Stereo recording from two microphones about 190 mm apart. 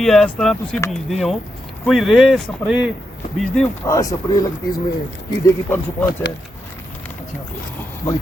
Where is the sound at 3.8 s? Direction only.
15° left (ahead or behind).